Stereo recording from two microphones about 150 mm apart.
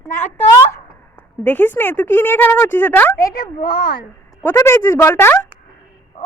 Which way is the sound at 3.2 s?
30° left (ahead or behind).